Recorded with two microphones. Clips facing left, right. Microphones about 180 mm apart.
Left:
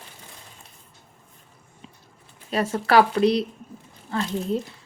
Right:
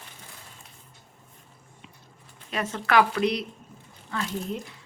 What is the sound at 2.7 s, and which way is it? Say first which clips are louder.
Speech: left 4 dB; 35° left (ahead or behind).